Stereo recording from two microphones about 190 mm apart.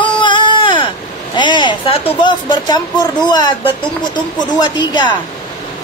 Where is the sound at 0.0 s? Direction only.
25° left (ahead or behind).